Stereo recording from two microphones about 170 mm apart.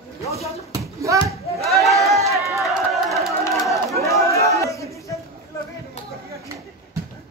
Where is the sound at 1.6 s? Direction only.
Centre (ahead or behind).